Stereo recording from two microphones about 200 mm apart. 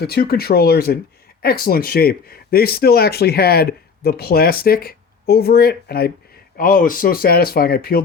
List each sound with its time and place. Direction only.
0.0 s speech: 50° left (ahead or behind)